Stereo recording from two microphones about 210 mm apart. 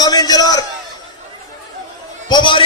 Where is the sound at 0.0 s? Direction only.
20° left (ahead or behind).